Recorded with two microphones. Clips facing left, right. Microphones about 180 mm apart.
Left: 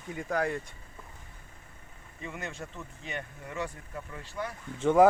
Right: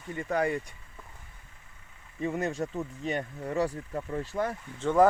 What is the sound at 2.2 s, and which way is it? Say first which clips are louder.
Speech: right 10 dB; 35° right (ahead or behind).